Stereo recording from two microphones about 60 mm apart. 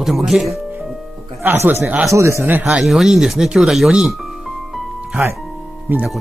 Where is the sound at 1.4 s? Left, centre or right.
Right.